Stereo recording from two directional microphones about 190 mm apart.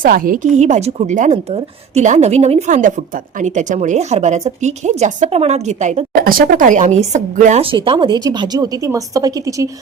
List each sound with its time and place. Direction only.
0.0 s a woman's voice: 45° right (ahead or behind)
7.6 s a woman's voice: 25° right (ahead or behind)